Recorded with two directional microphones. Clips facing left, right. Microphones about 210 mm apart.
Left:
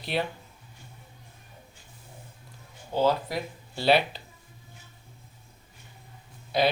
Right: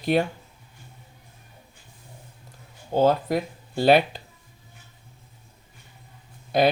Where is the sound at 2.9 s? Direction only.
50° right (ahead or behind).